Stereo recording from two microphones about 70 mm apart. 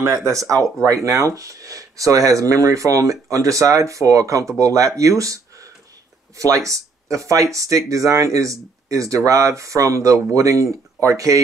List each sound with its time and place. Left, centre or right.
0.1 s speech: right